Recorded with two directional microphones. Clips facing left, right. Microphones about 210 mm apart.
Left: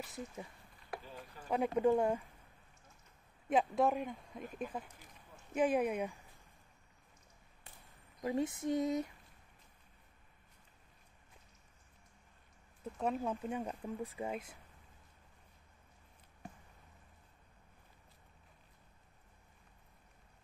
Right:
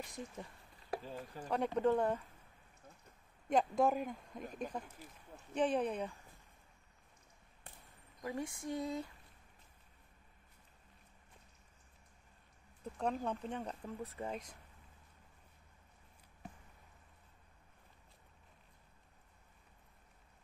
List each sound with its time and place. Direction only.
0.0 s speech: 5° left (ahead or behind)
1.5 s speech: 10° left (ahead or behind)
3.4 s speech: centre (ahead or behind)
8.2 s a sound: 20° left (ahead or behind)
13.0 s speech: 5° left (ahead or behind)